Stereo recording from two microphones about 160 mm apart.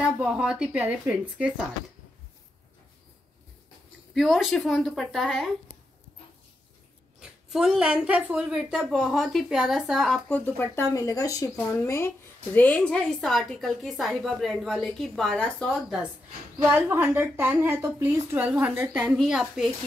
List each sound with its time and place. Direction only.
0.0 s speech: 5° right (ahead or behind)
4.1 s a woman's voice: centre (ahead or behind)
7.2 s a woman's voice: 5° right (ahead or behind)
16.7 s speech: 15° right (ahead or behind)